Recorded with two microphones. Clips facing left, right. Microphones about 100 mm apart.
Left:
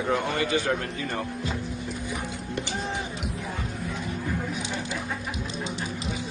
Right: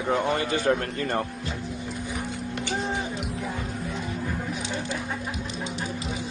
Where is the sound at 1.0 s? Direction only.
50° right (ahead or behind).